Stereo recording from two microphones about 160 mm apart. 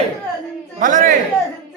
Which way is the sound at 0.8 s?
55° right (ahead or behind).